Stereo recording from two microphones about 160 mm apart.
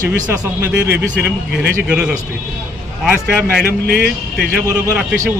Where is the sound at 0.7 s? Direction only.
90° right.